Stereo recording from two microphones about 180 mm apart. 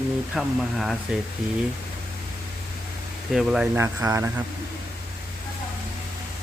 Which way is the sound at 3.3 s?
Centre (ahead or behind).